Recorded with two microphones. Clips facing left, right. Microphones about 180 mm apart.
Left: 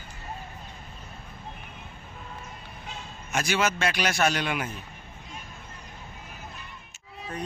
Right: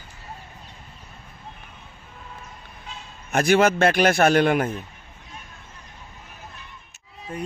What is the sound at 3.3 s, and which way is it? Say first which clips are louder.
A man's voice: right 9 dB; 55° right (ahead or behind).